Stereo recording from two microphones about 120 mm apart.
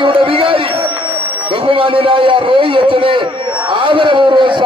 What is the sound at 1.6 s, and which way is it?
A man's voice, 45° right (ahead or behind).